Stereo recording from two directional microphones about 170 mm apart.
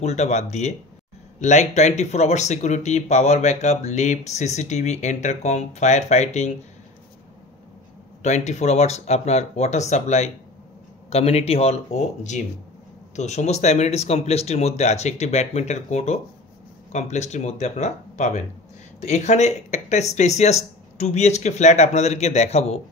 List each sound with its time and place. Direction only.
0.0 s speech: 40° left (ahead or behind)
8.2 s speech: 40° left (ahead or behind)